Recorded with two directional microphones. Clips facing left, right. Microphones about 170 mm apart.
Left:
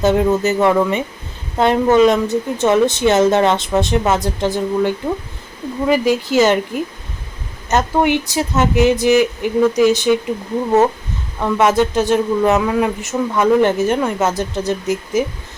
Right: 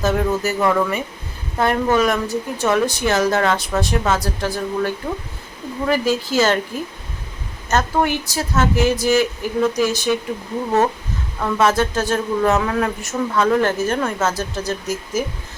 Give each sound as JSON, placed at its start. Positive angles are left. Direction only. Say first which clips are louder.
{"t": 0.0, "sound": "a woman's voice", "louder": "left 5 dB", "side_deg": 25}
{"t": 7.7, "sound": "a woman's voice", "louder": "left 4 dB", "side_deg": 20}
{"t": 11.3, "sound": "a woman's voice", "louder": "left 3 dB", "side_deg": 15}